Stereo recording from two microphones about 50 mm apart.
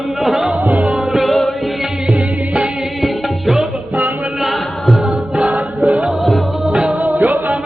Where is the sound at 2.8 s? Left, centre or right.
Centre.